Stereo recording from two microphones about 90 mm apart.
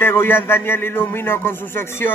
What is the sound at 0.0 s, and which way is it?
Speech, 25° left (ahead or behind).